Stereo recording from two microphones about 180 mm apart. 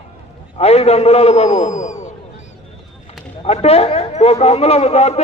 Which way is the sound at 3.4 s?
35° left (ahead or behind).